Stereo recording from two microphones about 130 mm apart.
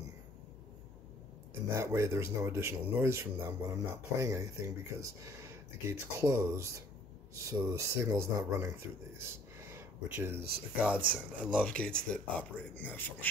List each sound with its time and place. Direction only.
1.7 s speech: 25° right (ahead or behind)
11.6 s speech: 10° left (ahead or behind)